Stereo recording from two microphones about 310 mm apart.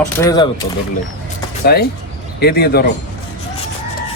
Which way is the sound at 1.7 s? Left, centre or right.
Left.